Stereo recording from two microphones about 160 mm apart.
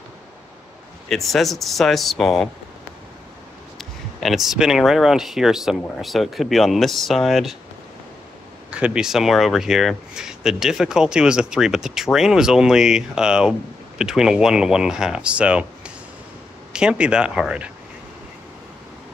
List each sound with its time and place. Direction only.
1.0 s speech: centre (ahead or behind)
3.7 s speech: centre (ahead or behind)
8.6 s speech: 5° right (ahead or behind)